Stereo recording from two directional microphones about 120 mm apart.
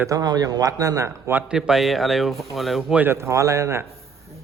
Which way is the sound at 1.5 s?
5° right (ahead or behind).